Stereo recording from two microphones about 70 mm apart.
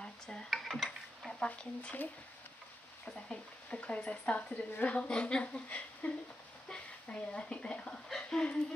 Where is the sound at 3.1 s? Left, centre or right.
Centre.